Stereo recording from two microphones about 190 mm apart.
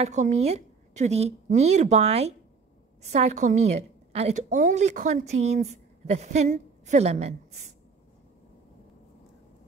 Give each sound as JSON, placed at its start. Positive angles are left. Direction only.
{"t": 0.0, "sound": "a woman's voice", "side_deg": -35}